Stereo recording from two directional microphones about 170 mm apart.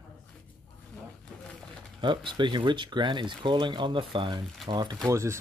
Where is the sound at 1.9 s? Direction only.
30° right (ahead or behind).